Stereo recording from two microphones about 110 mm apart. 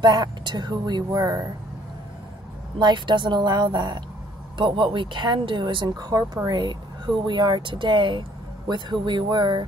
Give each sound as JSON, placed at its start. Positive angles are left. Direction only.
{"t": 0.0, "sound": "speech", "side_deg": -40}
{"t": 2.8, "sound": "speech", "side_deg": -45}